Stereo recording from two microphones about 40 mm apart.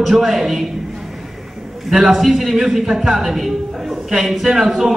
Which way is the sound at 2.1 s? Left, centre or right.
Centre.